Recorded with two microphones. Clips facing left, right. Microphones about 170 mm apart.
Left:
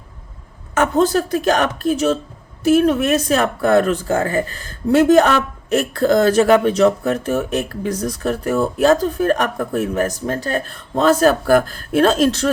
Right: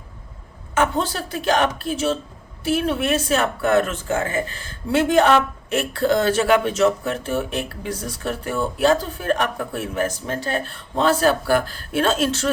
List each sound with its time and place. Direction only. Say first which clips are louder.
0.7 s a woman's voice: left 6 dB; 45° left (ahead or behind)